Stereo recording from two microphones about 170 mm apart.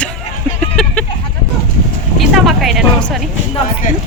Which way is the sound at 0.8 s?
5° left (ahead or behind).